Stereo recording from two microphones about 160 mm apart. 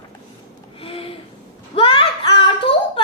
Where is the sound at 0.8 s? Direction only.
35° left (ahead or behind).